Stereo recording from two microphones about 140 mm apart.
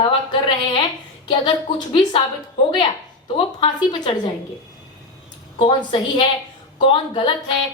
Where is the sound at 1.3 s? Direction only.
35° left (ahead or behind).